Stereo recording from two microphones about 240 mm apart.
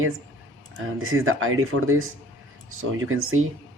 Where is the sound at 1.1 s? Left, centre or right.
Right.